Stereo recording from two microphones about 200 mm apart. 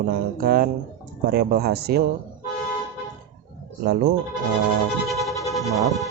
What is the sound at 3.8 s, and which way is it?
Speech, 50° right (ahead or behind).